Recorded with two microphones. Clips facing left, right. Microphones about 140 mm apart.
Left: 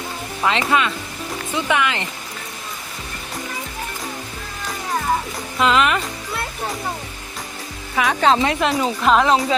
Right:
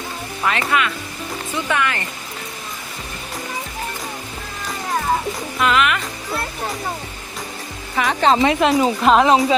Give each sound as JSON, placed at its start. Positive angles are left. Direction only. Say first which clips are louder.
{"t": 0.4, "sound": "music", "louder": "left 2 dB", "side_deg": 20}
{"t": 1.5, "sound": "speech", "louder": "left 1 dB", "side_deg": 15}
{"t": 5.5, "sound": "music", "louder": "left 1 dB", "side_deg": 25}
{"t": 7.9, "sound": "speech", "louder": "even", "side_deg": 0}